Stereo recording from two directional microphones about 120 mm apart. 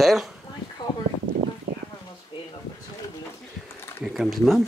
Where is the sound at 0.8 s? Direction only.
40° left (ahead or behind).